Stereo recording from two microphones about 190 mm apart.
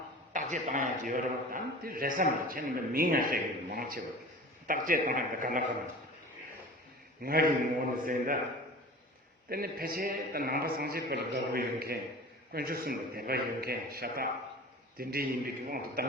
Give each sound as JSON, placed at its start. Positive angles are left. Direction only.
{"t": 0.3, "sound": "a man's voice", "side_deg": -45}
{"t": 7.2, "sound": "a man's voice", "side_deg": -50}
{"t": 9.5, "sound": "a man's voice", "side_deg": -50}